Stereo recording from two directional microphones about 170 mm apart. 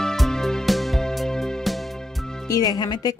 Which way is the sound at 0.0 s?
Centre (ahead or behind).